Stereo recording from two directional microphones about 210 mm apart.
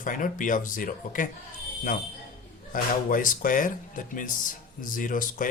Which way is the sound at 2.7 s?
40° left (ahead or behind).